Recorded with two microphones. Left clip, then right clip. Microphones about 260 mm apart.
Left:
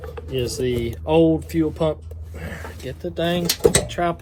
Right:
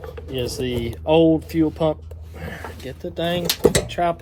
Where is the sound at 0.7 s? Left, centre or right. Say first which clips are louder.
Right 2 dB; right.